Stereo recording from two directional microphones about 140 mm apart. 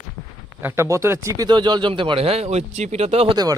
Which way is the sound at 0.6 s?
15° right (ahead or behind).